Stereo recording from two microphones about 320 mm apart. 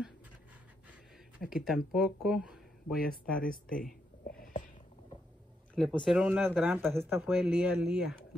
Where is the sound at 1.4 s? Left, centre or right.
Centre.